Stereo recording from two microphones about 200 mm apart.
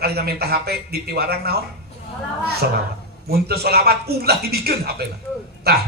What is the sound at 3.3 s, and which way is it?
A man's voice, 50° right (ahead or behind).